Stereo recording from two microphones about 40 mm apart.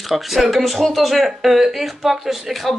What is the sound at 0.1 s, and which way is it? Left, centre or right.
Speech, centre.